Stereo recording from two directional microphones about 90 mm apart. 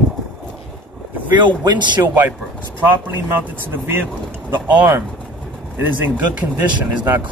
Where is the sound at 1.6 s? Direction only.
55° right (ahead or behind).